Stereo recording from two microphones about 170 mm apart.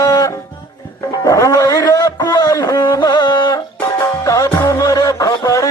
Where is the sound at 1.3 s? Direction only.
20° left (ahead or behind).